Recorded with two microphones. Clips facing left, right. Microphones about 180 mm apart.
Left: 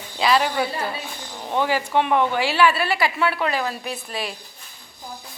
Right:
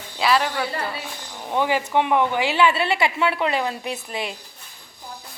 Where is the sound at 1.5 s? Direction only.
15° right (ahead or behind).